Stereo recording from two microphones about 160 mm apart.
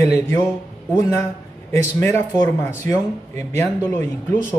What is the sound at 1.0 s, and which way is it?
Speech, 20° left (ahead or behind).